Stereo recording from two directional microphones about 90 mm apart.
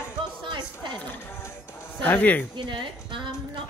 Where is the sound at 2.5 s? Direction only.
60° right (ahead or behind).